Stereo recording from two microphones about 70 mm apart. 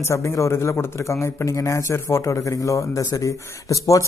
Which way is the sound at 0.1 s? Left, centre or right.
Left.